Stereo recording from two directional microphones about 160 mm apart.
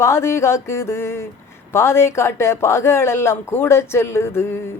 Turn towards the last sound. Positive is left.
turn(degrees=15)  # may be behind; listen again after turning